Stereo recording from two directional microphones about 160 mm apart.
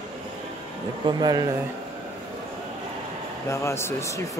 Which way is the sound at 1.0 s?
25° right (ahead or behind).